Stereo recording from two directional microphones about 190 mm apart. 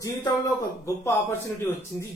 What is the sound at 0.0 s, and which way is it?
A man's voice, 20° left (ahead or behind).